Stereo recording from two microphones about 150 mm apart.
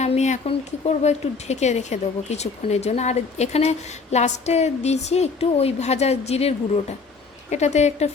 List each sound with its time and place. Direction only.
0.0 s speech: 50° left (ahead or behind)